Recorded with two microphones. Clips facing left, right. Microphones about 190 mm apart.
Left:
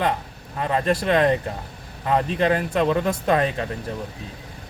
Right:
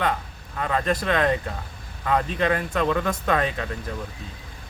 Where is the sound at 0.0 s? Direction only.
25° left (ahead or behind).